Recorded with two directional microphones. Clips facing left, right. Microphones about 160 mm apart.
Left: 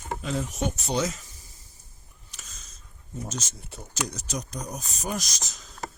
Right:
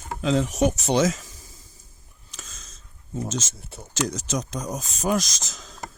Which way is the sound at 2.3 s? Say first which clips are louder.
Right 6 dB; 90° right.